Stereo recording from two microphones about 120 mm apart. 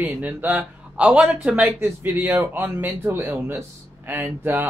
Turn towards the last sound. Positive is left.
turn(degrees=-20)  # may be behind; listen again after turning